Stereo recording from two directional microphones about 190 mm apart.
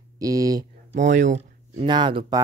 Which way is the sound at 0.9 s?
40° right (ahead or behind).